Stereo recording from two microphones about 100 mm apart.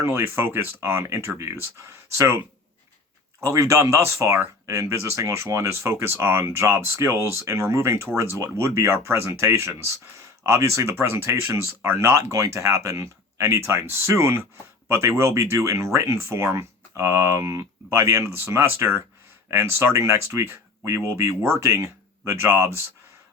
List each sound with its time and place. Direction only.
0.0 s speech: 25° right (ahead or behind)
3.4 s speech: 30° right (ahead or behind)